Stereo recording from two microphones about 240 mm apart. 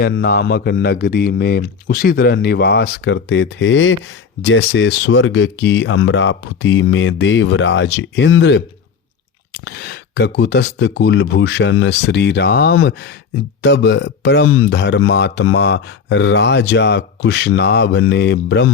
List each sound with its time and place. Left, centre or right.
0.0 s speech: left
9.6 s speech: left